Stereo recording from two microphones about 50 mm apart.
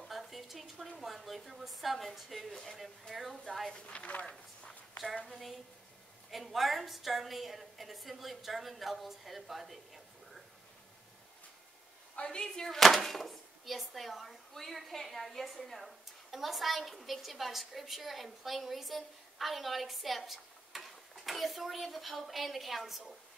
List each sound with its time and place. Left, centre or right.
0.1 s a sound: centre
0.9 s speech: centre
3.7 s speech: left
6.3 s speech: centre
12.2 s speech: centre